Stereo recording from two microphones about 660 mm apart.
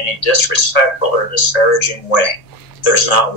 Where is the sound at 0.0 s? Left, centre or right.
Left.